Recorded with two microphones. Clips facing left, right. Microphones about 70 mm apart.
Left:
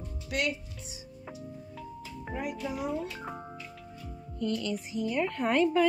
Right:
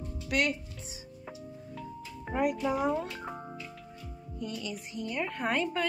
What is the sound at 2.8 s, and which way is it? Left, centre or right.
Speech, right.